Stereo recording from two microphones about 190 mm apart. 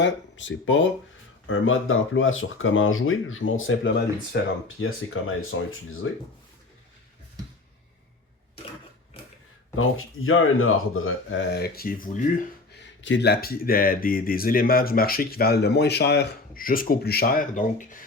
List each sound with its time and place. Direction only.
0.0 s speech: 75° left (ahead or behind)
4.8 s speech: 90° left
9.7 s speech: 90° left; by 12.3 s 45° left (ahead or behind)
12.7 s speech: 75° left (ahead or behind); by 17.8 s 40° left (ahead or behind)